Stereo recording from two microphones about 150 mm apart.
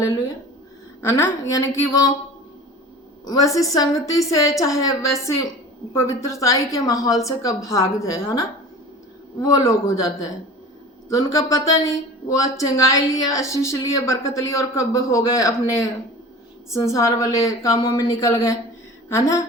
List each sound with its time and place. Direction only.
1.0 s speech: 15° left (ahead or behind)
3.2 s a woman's voice: 20° left (ahead or behind)